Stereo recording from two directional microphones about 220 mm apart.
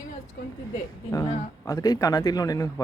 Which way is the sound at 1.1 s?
15° left (ahead or behind).